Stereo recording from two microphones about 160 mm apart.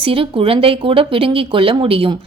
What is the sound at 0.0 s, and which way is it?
A woman's voice, 35° right (ahead or behind).